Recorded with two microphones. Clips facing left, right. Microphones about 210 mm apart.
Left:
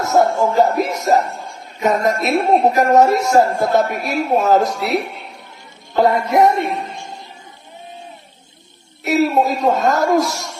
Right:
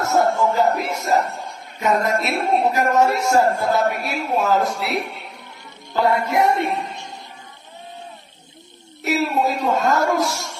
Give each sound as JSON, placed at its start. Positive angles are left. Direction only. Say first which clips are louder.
{"t": 0.0, "sound": "music", "louder": "left 3 dB", "side_deg": 40}
{"t": 1.8, "sound": "a man's voice", "louder": "left 3 dB", "side_deg": 40}
{"t": 6.0, "sound": "a man's voice", "louder": "left 5 dB", "side_deg": 40}
{"t": 9.0, "sound": "a man's voice", "louder": "left 5 dB", "side_deg": 40}